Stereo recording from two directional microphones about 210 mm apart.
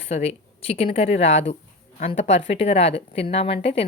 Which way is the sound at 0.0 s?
30° left (ahead or behind).